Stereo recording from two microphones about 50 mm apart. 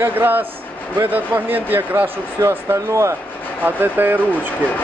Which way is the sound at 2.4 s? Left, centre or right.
Right.